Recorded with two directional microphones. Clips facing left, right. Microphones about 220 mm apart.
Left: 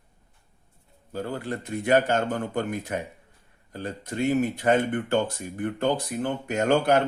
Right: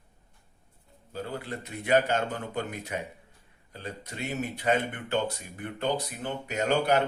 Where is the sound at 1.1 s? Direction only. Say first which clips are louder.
Left 5 dB; 50° left (ahead or behind).